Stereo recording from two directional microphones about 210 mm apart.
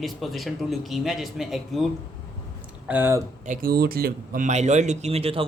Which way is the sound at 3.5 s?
45° right (ahead or behind).